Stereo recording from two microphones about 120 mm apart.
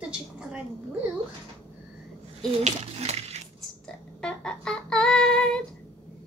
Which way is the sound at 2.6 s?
60° right (ahead or behind).